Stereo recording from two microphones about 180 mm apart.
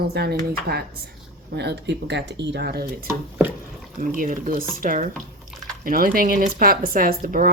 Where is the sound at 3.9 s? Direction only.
50° right (ahead or behind).